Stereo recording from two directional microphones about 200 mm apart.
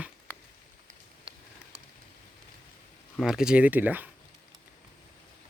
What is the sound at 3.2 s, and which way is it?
Speech, 5° right (ahead or behind).